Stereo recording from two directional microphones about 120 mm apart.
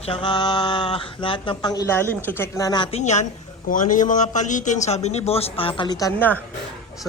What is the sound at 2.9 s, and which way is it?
Speech, 75° left (ahead or behind).